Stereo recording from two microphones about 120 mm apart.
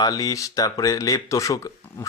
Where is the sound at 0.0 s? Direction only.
30° left (ahead or behind).